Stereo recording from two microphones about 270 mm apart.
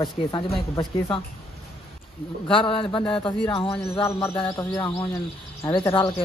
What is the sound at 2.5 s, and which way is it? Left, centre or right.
A man's voice, centre.